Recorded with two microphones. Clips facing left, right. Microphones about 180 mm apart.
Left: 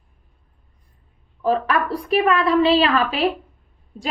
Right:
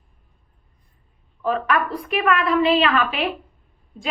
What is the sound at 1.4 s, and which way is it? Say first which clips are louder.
A woman's voice: left 2 dB; 35° left (ahead or behind).